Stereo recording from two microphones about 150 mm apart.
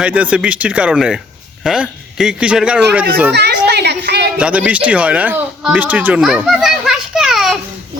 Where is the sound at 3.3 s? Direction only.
90° right.